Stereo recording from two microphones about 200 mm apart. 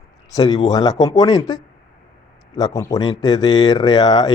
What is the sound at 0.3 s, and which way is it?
Speech, 20° left (ahead or behind).